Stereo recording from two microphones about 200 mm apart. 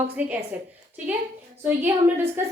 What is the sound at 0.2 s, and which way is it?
Speech, 5° right (ahead or behind).